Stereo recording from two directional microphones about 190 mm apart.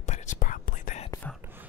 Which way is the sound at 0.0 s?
40° left (ahead or behind).